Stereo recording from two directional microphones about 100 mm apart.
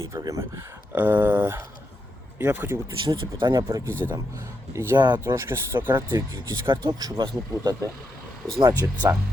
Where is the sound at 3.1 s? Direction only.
40° right (ahead or behind).